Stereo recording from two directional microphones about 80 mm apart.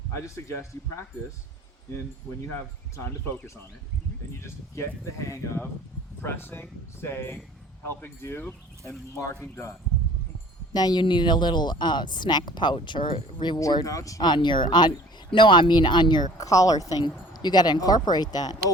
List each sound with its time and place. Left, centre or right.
0.1 s speech: left
2.9 s speech: left
6.2 s speech: left
8.9 s speech: left
10.8 s a woman's voice: left
13.8 s speech: left
14.2 s a woman's voice: left
16.4 s speech: left
17.0 s speech: left